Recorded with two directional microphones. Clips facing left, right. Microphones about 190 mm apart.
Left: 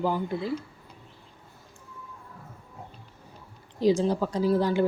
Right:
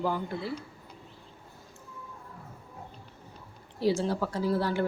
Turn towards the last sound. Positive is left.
turn(degrees=15)  # may be behind; listen again after turning